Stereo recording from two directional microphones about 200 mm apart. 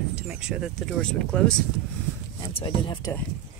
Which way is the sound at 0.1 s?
5° right (ahead or behind).